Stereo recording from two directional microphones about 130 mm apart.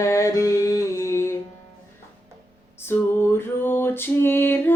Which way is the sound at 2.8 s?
20° left (ahead or behind).